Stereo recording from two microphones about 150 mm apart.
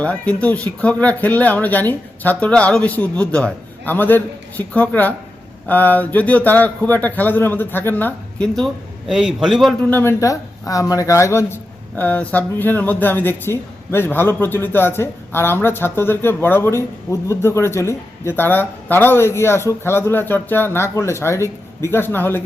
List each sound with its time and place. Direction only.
0.0 s speech: 10° left (ahead or behind)
9.9 s speech: 15° left (ahead or behind)